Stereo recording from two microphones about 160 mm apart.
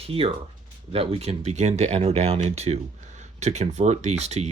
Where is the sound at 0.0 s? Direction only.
35° right (ahead or behind).